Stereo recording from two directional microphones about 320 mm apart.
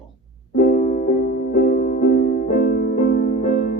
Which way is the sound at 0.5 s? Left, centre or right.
Left.